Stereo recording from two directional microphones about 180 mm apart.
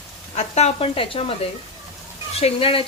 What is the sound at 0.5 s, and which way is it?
Speech, 35° left (ahead or behind).